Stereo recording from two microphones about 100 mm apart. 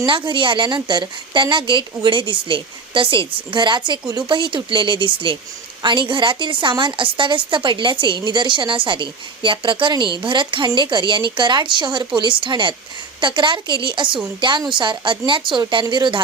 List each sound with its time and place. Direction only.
0.0 s a woman's voice: 55° right (ahead or behind)